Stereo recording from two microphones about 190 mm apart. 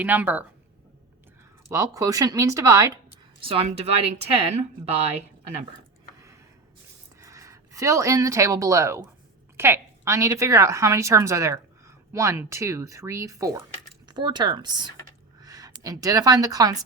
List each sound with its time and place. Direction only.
0.0 s a woman's voice: 10° right (ahead or behind)
1.7 s a woman's voice: 15° right (ahead or behind)
3.4 s speech: 30° right (ahead or behind)
7.2 s a woman's voice: 15° right (ahead or behind)